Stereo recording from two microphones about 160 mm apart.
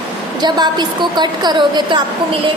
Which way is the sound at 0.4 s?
25° right (ahead or behind).